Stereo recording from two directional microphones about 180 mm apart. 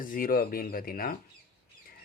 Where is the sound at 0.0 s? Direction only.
50° left (ahead or behind).